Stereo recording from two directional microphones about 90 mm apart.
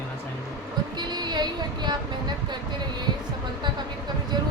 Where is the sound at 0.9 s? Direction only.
55° right (ahead or behind).